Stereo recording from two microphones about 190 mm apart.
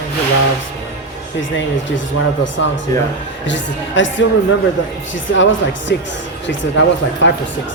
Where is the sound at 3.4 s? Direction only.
75° left (ahead or behind).